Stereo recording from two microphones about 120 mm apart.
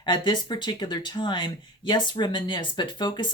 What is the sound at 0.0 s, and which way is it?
Speech, 40° left (ahead or behind).